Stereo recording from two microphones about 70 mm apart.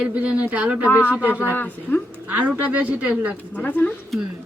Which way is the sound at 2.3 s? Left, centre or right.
Right.